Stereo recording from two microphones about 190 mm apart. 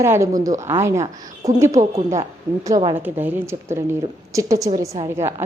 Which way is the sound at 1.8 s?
35° right (ahead or behind).